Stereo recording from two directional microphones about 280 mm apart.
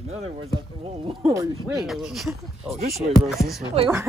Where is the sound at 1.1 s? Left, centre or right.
Centre.